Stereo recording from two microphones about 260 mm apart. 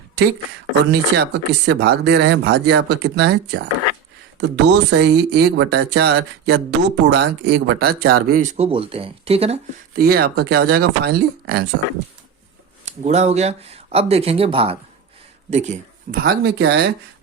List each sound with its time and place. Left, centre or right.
0.9 s speech: right
10.0 s speech: right
12.8 s speech: right
16.2 s speech: right